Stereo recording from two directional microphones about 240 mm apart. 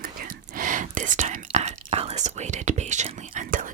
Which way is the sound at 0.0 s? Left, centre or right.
Right.